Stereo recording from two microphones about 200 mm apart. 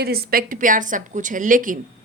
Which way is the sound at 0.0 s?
50° right (ahead or behind).